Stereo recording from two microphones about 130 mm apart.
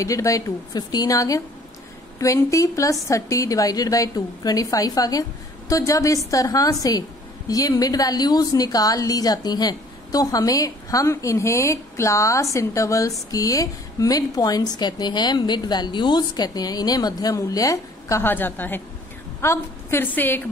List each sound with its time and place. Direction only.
0.0 s a woman's voice: 25° left (ahead or behind)